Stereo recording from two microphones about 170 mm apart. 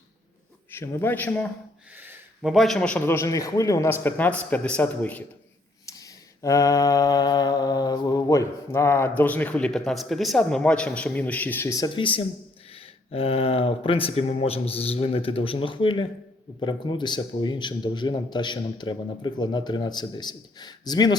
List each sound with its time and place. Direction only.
0.7 s a man's voice: 15° left (ahead or behind)
2.0 s a man's voice: 10° right (ahead or behind); by 5.2 s 10° left (ahead or behind)
5.8 s mantra: 20° left (ahead or behind)
11.9 s a man's voice: 30° left (ahead or behind)